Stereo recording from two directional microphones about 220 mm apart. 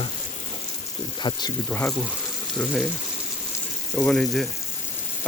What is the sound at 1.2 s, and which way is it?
Speech, 20° left (ahead or behind).